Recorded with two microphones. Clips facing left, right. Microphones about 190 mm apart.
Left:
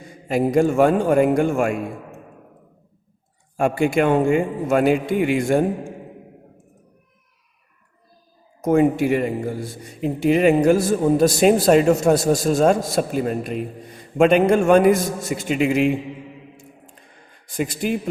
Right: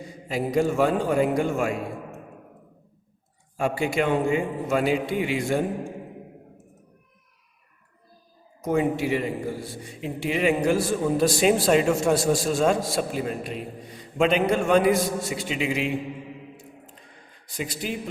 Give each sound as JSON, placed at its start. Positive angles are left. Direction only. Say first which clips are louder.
{"t": 0.3, "sound": "a man's voice", "louder": "left 6 dB", "side_deg": 50}
{"t": 3.6, "sound": "a man's voice", "louder": "left 6 dB", "side_deg": 50}
{"t": 8.6, "sound": "a man's voice", "louder": "left 7 dB", "side_deg": 50}
{"t": 17.6, "sound": "a man's voice", "louder": "left 7 dB", "side_deg": 55}